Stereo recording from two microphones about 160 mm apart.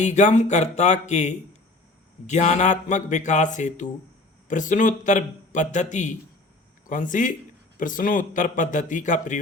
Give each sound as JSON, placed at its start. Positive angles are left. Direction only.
{"t": 0.0, "sound": "a man's voice", "side_deg": 50}